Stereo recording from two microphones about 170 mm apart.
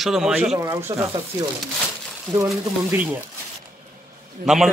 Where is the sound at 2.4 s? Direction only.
15° right (ahead or behind).